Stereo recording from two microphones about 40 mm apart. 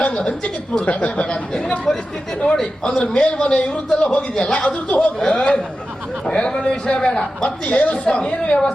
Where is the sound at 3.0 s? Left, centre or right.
Left.